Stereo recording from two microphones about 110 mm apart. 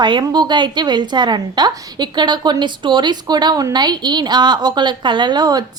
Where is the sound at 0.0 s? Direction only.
40° right (ahead or behind).